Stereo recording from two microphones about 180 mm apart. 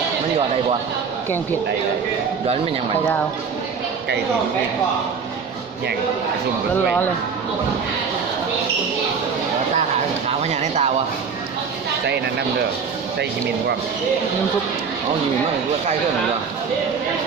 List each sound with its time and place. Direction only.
10.2 s speech: 35° right (ahead or behind)
12.0 s speech: 70° right (ahead or behind)